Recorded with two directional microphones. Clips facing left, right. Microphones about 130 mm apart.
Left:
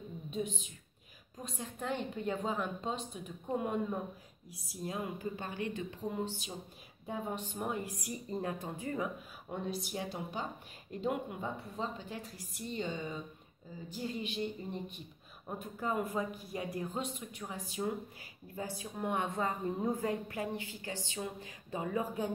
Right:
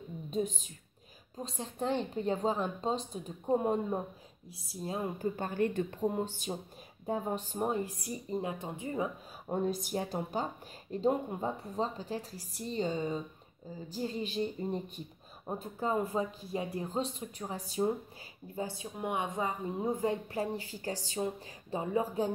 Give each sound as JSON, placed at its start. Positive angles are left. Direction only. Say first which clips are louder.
{"t": 0.3, "sound": "speech", "louder": "right 4 dB", "side_deg": -40}
{"t": 1.4, "sound": "a woman's voice", "louder": "right 5 dB", "side_deg": -30}
{"t": 8.3, "sound": "a woman's voice", "louder": "right 2 dB", "side_deg": -20}
{"t": 9.5, "sound": "a woman's voice", "louder": "right 6 dB", "side_deg": -45}
{"t": 18.9, "sound": "a woman's voice", "louder": "right 1 dB", "side_deg": -15}